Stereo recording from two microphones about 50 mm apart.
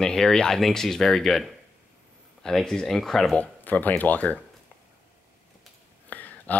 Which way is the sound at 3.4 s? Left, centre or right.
Left.